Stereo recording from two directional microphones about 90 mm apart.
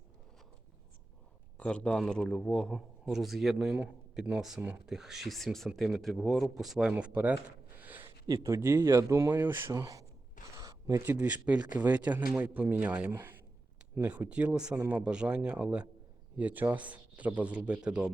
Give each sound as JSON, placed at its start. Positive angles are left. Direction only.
{"t": 1.5, "sound": "speech", "side_deg": 10}
{"t": 6.9, "sound": "speech", "side_deg": -20}
{"t": 7.8, "sound": "a sound", "side_deg": -20}
{"t": 8.3, "sound": "a man's voice", "side_deg": -30}
{"t": 9.3, "sound": "speech", "side_deg": -25}
{"t": 9.7, "sound": "a man's voice", "side_deg": -40}
{"t": 10.6, "sound": "a sound", "side_deg": -45}
{"t": 11.2, "sound": "speech", "side_deg": -15}